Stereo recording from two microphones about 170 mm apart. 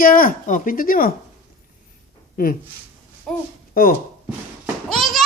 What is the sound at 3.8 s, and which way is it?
Speech, 60° left (ahead or behind).